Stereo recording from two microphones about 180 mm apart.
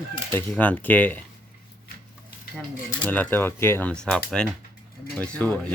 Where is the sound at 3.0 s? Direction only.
10° left (ahead or behind).